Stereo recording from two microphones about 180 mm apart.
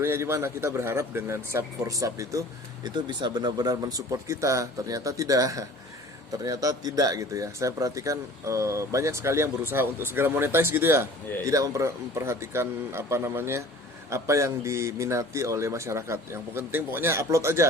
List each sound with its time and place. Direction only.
0.0 s speech: 15° right (ahead or behind)